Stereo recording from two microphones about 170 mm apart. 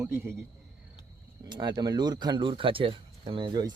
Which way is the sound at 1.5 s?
25° right (ahead or behind).